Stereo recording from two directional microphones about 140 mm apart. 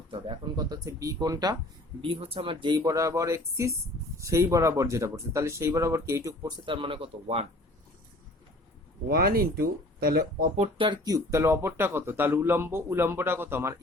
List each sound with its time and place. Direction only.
0.1 s speech: 30° right (ahead or behind)
2.0 s speech: 40° right (ahead or behind); by 6.5 s 20° right (ahead or behind)
6.7 s speech: 40° right (ahead or behind)
9.0 s speech: 90° right
10.8 s speech: 35° right (ahead or behind); by 13.7 s 15° right (ahead or behind)